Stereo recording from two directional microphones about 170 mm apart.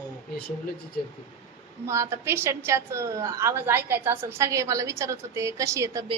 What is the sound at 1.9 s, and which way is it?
A woman's voice, 15° right (ahead or behind).